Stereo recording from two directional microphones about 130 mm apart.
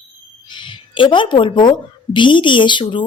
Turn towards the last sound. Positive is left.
turn(degrees=40)  # may be behind; listen again after turning